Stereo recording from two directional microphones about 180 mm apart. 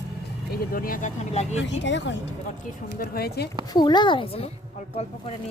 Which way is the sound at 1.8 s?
80° left.